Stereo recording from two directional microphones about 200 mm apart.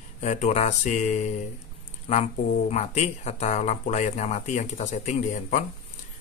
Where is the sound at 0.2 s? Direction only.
35° left (ahead or behind).